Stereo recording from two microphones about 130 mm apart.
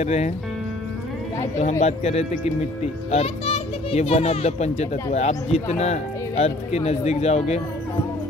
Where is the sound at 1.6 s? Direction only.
60° left (ahead or behind).